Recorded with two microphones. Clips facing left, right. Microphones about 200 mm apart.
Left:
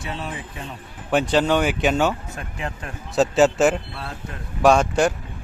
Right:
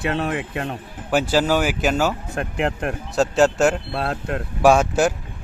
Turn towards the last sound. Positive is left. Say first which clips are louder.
# right 1 dB
turn(degrees=-5)  # may be behind; listen again after turning